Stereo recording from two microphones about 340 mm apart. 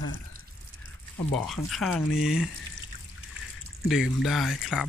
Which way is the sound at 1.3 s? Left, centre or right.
Centre.